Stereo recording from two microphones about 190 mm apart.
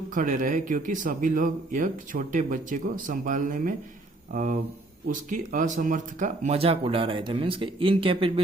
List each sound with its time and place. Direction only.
0.1 s speech: 45° right (ahead or behind); by 8.3 s 30° right (ahead or behind)